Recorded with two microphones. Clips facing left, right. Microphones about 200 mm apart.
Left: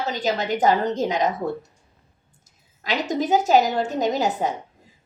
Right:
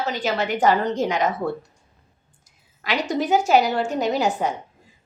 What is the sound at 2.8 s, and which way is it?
A woman's voice, 40° left (ahead or behind).